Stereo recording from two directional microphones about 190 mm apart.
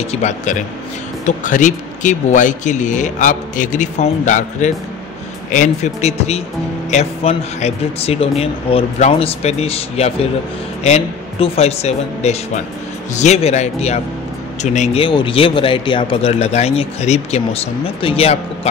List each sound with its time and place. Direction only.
0.0 s speech: 35° left (ahead or behind)